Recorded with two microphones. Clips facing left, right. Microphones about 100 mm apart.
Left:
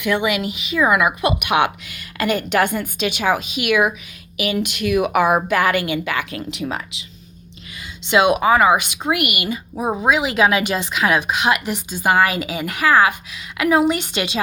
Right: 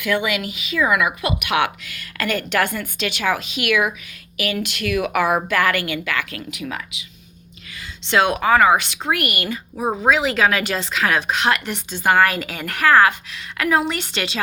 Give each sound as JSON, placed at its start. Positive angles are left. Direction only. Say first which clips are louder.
{"t": 0.0, "sound": "a woman's voice", "louder": "left 2 dB", "side_deg": 20}
{"t": 8.1, "sound": "speech", "louder": "left 2 dB", "side_deg": 15}